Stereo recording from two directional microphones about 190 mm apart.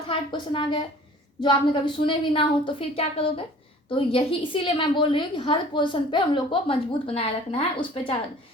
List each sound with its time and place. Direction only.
0.1 s a woman's voice: 25° left (ahead or behind)